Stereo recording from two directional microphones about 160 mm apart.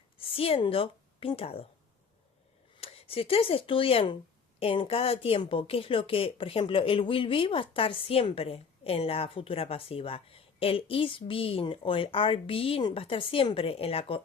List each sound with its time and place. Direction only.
0.2 s speech: 35° left (ahead or behind)
2.7 s speech: 35° left (ahead or behind)